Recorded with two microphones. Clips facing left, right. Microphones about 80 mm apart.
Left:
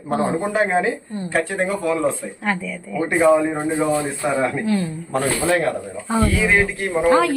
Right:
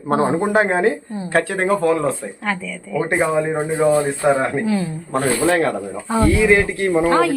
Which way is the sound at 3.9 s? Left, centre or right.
Right.